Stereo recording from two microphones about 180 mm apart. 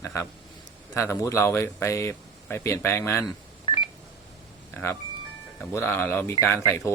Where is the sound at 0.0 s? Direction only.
15° left (ahead or behind).